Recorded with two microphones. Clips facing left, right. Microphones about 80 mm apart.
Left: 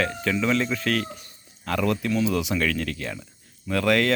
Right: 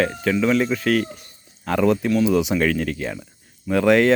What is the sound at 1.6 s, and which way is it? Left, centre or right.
Speech, right.